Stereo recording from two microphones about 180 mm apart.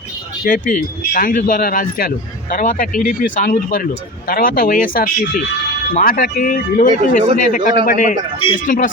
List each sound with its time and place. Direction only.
0.4 s a man's voice: 45° left (ahead or behind)